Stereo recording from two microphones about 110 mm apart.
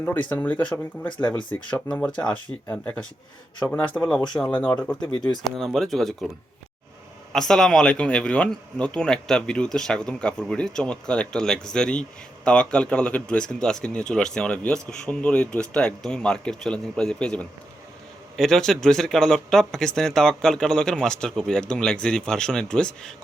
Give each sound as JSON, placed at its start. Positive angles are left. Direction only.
{"t": 0.0, "sound": "speech", "side_deg": 15}
{"t": 5.1, "sound": "speech", "side_deg": 40}
{"t": 5.5, "sound": "speech", "side_deg": 5}
{"t": 7.3, "sound": "speech", "side_deg": 5}